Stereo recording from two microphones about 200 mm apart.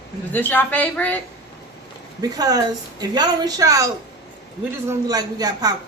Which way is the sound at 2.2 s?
20° right (ahead or behind).